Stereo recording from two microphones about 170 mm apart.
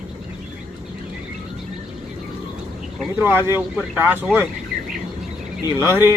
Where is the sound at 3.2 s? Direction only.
15° right (ahead or behind).